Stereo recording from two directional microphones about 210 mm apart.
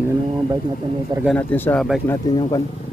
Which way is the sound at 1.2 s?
5° left (ahead or behind).